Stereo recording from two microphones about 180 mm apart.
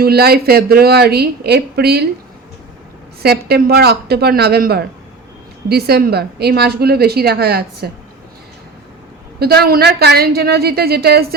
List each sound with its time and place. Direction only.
0.0 s a woman's voice: 60° right (ahead or behind)
3.2 s a woman's voice: 65° right (ahead or behind)
9.4 s a woman's voice: 60° right (ahead or behind)